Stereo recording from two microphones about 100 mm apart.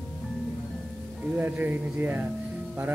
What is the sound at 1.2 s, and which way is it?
Speech, 15° right (ahead or behind).